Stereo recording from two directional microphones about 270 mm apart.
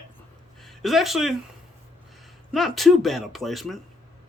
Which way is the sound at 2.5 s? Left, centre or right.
Centre.